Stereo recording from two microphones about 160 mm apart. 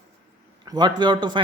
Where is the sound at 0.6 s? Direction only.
25° right (ahead or behind).